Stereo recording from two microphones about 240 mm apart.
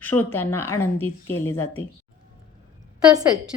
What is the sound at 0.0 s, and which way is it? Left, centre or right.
A woman's voice, centre.